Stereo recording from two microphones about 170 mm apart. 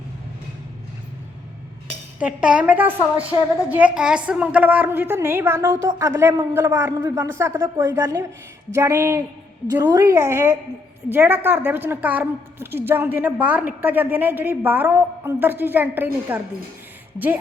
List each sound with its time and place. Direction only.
2.1 s a woman's voice: 5° right (ahead or behind)